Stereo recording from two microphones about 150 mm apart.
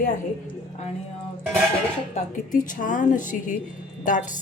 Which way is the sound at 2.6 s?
60° left (ahead or behind).